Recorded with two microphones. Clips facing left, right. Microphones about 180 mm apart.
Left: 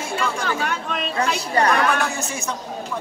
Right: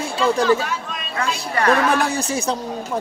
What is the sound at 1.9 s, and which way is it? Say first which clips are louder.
Speech: right 4 dB; 35° right (ahead or behind).